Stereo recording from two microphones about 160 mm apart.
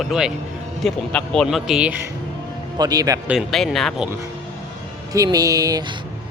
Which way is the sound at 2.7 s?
25° right (ahead or behind).